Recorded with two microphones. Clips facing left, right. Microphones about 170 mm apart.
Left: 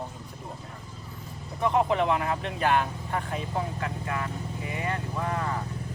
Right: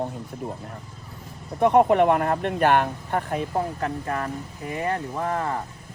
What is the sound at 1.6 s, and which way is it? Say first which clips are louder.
Speech: right 7 dB; 55° right (ahead or behind).